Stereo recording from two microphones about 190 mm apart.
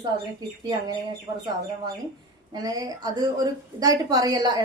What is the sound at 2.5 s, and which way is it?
A woman's voice, 20° right (ahead or behind).